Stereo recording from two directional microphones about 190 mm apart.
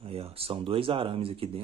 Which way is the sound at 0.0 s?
30° right (ahead or behind).